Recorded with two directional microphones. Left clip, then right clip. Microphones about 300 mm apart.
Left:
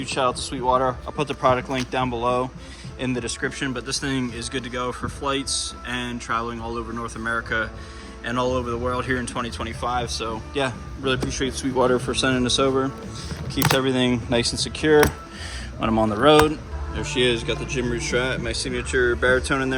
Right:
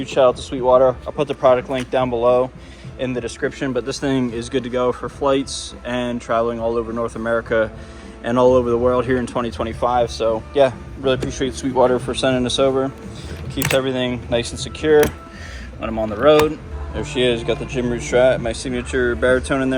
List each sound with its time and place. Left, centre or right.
0.0 s speech: centre